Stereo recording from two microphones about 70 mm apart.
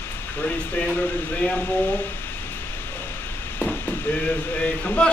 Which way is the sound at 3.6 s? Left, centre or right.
Left.